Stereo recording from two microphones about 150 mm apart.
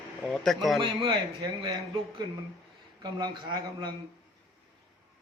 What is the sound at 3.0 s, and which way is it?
Speech, 25° right (ahead or behind).